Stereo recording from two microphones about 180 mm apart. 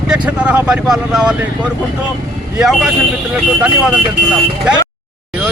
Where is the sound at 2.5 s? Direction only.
5° right (ahead or behind).